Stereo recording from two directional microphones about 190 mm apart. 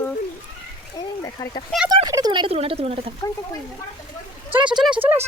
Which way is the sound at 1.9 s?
20° right (ahead or behind).